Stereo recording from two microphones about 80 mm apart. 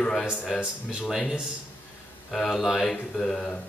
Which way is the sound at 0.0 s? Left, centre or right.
Centre.